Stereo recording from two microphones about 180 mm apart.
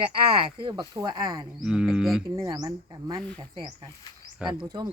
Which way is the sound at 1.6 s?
5° right (ahead or behind).